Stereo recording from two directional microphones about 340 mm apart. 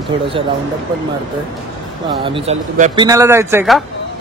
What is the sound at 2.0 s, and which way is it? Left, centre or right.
Speech, centre.